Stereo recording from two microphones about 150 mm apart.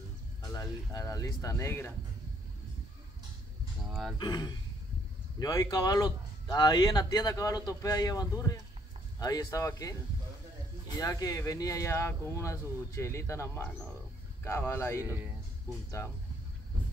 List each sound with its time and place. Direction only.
0.4 s speech: 25° left (ahead or behind)
3.8 s speech: centre (ahead or behind)
4.2 s speech: 25° left (ahead or behind)
11.0 s speech: 25° left (ahead or behind)
15.0 s speech: 15° right (ahead or behind)